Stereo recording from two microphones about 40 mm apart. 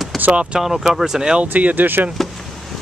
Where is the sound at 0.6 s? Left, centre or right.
Centre.